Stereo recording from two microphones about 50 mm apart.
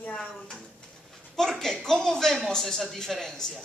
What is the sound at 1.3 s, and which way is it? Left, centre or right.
Speech, centre.